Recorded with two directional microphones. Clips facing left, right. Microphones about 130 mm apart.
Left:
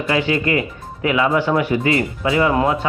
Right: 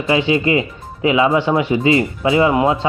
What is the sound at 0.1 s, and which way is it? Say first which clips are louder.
Speech: right 3 dB; 20° right (ahead or behind).